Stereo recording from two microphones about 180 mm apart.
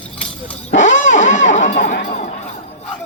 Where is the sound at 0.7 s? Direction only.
45° left (ahead or behind).